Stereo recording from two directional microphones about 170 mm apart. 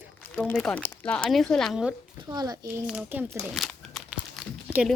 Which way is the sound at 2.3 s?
20° right (ahead or behind).